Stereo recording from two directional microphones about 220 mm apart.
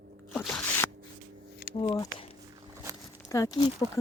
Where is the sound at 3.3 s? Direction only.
15° left (ahead or behind).